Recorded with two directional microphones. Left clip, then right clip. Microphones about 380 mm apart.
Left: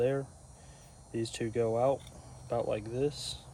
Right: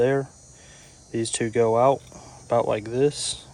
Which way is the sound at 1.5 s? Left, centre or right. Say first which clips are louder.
Right 10 dB; centre.